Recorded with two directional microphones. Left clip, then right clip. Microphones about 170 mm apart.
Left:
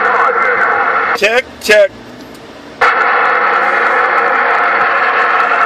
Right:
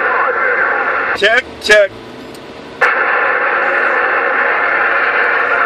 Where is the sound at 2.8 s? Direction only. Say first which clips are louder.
Left 2 dB; 45° left (ahead or behind).